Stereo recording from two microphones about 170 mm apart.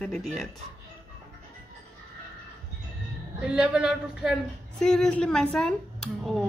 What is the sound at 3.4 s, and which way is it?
Speech, 5° right (ahead or behind).